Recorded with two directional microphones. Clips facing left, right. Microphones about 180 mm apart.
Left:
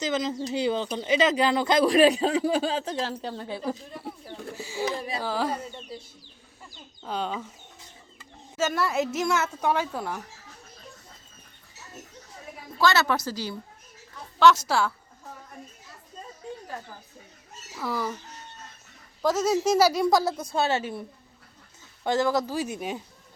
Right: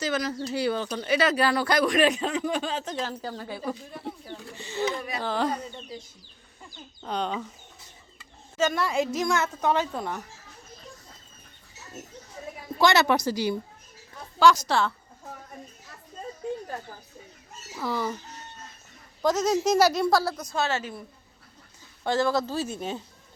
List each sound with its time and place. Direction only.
0.0 s speech: 20° left (ahead or behind)
4.5 s speech: 10° left (ahead or behind)
4.9 s speech: 30° left (ahead or behind)
5.2 s speech: 5° left (ahead or behind)
7.0 s a woman's voice: 5° left (ahead or behind)
8.5 s a woman's voice: 5° left (ahead or behind)
12.8 s a woman's voice: 15° right (ahead or behind)
14.3 s a woman's voice: 5° left (ahead or behind)
17.7 s a woman's voice: centre (ahead or behind)
19.2 s speech: 5° left (ahead or behind); by 20.9 s 30° left (ahead or behind)
22.0 s speech: 20° left (ahead or behind)